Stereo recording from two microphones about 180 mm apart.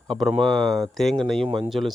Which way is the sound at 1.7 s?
Centre (ahead or behind).